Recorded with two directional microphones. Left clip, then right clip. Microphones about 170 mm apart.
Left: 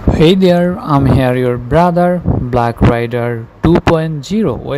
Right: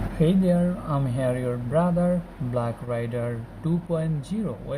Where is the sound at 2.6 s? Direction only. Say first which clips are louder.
Left 15 dB; 50° left (ahead or behind).